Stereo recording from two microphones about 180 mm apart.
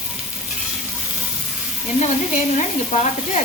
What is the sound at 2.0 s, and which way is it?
Sizzle, 45° left (ahead or behind).